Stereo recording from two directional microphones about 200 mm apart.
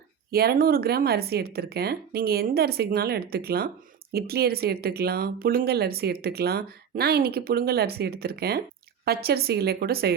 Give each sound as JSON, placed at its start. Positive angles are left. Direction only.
{"t": 0.3, "sound": "speech", "side_deg": -50}